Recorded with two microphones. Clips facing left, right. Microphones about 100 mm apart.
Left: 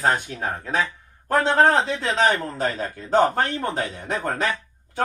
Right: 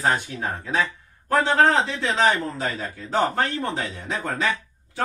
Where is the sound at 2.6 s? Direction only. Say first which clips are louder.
Left 3 dB; 50° left (ahead or behind).